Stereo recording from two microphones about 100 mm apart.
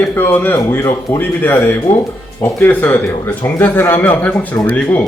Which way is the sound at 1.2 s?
20° left (ahead or behind).